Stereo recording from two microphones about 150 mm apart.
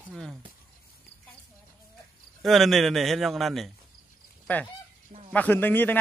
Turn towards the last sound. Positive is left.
turn(degrees=15)  # may be behind; listen again after turning